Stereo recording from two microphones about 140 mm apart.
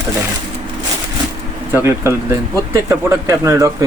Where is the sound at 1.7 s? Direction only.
20° right (ahead or behind).